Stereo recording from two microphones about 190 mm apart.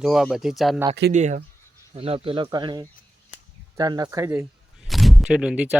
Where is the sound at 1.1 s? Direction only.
40° right (ahead or behind); by 4.4 s 15° right (ahead or behind).